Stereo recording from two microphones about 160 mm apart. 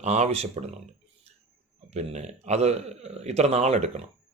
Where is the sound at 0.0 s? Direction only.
45° right (ahead or behind).